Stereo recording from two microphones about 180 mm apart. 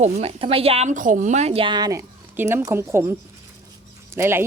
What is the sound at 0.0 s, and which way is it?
A woman's voice, 35° right (ahead or behind).